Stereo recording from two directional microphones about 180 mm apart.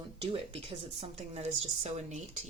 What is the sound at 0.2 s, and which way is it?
Speech, 30° right (ahead or behind).